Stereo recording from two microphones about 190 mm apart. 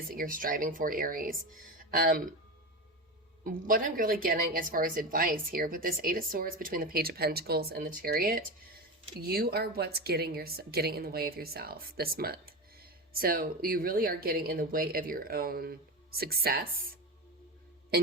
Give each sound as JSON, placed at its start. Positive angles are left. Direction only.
{"t": 0.1, "sound": "a woman's voice", "side_deg": -50}
{"t": 3.4, "sound": "a woman's voice", "side_deg": -45}
{"t": 17.9, "sound": "music", "side_deg": -55}